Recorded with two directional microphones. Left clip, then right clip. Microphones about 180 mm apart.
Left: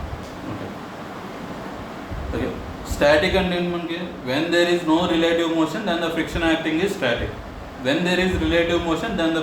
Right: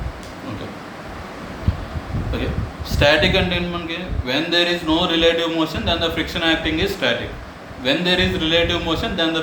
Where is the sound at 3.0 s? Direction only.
15° right (ahead or behind).